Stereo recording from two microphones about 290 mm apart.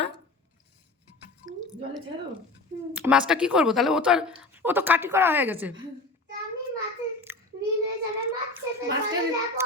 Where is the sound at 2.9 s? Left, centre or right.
Centre.